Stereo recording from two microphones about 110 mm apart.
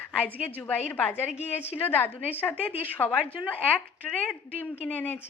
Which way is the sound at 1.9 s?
20° left (ahead or behind).